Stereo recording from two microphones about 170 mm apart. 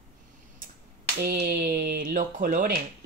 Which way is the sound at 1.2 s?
65° right (ahead or behind).